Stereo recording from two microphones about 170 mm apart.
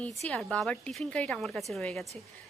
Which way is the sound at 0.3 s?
5° left (ahead or behind).